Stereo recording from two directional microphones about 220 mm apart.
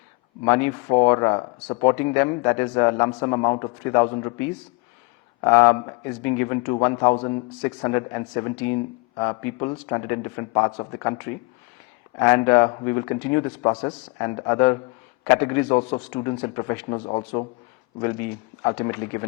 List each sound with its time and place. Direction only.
0.4 s speech: 15° left (ahead or behind)
5.4 s speech: 15° left (ahead or behind)
12.2 s speech: 15° left (ahead or behind)